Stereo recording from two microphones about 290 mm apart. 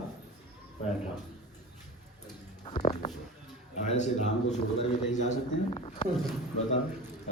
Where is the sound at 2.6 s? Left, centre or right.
Centre.